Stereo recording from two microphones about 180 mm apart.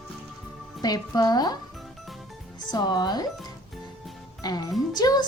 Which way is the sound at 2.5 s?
25° left (ahead or behind).